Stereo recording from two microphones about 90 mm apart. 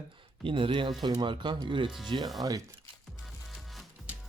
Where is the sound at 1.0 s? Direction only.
55° right (ahead or behind).